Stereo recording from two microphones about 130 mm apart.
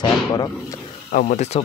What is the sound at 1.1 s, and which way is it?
Speech, 70° left (ahead or behind).